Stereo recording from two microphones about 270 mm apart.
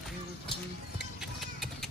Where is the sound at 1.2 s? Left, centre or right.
Centre.